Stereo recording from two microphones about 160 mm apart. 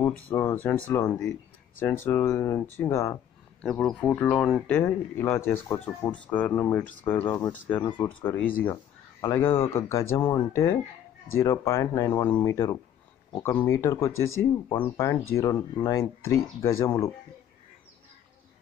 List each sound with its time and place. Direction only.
0.0 s speech: 15° left (ahead or behind)
3.6 s speech: 5° left (ahead or behind)